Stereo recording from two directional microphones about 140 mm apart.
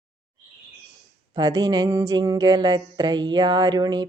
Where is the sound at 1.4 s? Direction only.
25° right (ahead or behind).